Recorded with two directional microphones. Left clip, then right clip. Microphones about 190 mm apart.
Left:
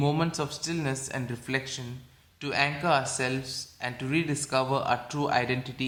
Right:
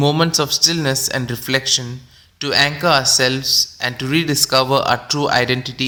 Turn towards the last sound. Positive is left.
turn(degrees=-35)  # may be behind; listen again after turning